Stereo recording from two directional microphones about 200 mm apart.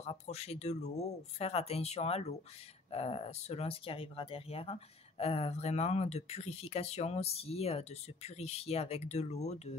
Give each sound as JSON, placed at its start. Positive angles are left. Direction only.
{"t": 0.0, "sound": "speech", "side_deg": 30}